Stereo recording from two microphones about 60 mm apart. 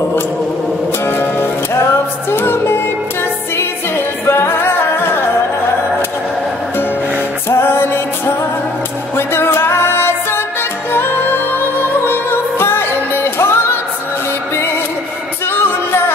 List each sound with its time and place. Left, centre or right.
1.0 s music: left
4.3 s music: left
7.4 s music: left